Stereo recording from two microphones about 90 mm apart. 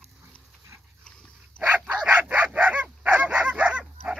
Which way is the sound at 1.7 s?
15° right (ahead or behind).